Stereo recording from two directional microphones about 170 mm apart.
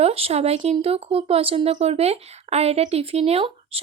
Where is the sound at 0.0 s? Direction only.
35° right (ahead or behind).